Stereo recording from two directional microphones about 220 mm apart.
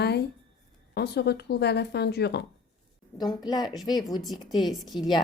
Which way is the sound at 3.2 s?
20° left (ahead or behind).